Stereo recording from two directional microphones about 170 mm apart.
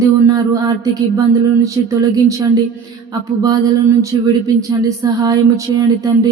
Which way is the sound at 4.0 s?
20° right (ahead or behind).